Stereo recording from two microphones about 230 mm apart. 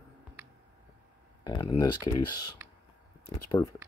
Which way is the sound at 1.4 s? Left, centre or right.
Centre.